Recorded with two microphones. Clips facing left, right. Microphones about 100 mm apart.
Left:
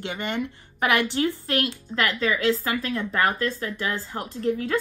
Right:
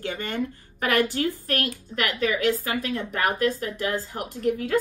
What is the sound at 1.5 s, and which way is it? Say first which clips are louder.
Speech: left 2 dB; 25° left (ahead or behind).